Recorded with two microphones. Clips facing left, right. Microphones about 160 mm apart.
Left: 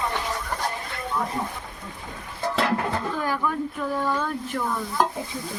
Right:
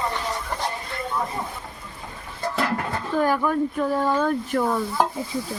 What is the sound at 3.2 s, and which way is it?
Speech, 50° right (ahead or behind).